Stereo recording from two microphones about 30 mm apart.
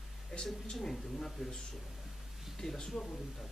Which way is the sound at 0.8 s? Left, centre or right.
Centre.